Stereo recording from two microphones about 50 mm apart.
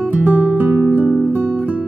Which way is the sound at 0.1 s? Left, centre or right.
Right.